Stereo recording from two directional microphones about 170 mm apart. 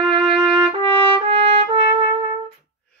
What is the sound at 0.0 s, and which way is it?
Trumpet, 30° right (ahead or behind).